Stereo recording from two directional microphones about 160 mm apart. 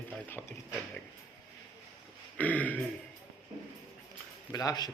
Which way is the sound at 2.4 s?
10° left (ahead or behind).